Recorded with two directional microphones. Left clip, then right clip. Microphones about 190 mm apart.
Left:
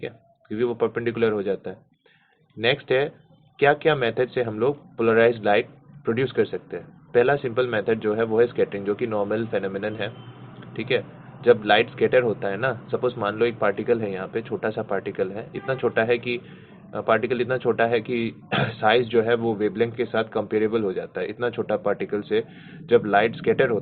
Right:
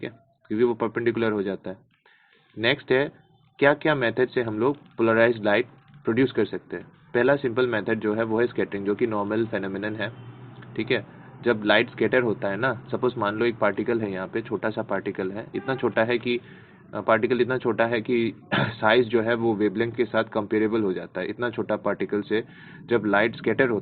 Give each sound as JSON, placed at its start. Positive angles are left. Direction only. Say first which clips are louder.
{"t": 0.0, "sound": "a man's voice", "louder": "left 2 dB", "side_deg": -45}